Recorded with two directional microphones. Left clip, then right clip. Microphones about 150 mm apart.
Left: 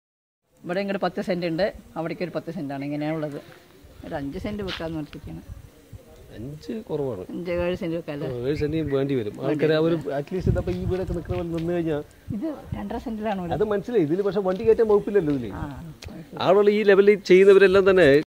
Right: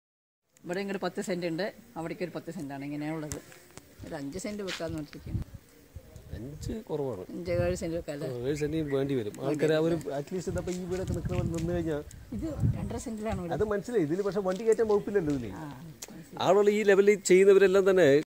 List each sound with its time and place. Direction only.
0.7 s speech: 50° left (ahead or behind)
4.1 s speech: 15° left (ahead or behind)
6.6 s speech: 15° right (ahead or behind)
7.4 s speech: 20° left (ahead or behind)
8.3 s speech: 10° right (ahead or behind)
11.7 s speech: 10° right (ahead or behind)
12.7 s speech: 20° left (ahead or behind)
13.5 s speech: 10° right (ahead or behind)